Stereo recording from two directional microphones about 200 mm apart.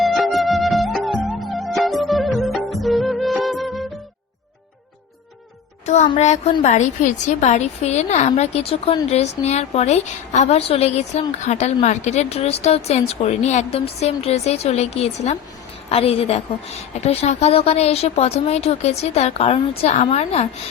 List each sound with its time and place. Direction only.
0.0 s music: centre (ahead or behind)
5.8 s a woman's voice: 35° left (ahead or behind)